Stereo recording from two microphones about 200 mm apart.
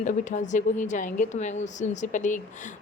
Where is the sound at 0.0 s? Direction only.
40° left (ahead or behind).